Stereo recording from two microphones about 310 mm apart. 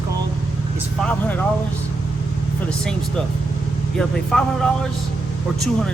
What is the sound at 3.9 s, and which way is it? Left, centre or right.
Speech, centre.